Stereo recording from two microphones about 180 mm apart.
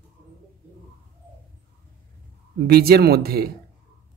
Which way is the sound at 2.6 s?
60° right (ahead or behind).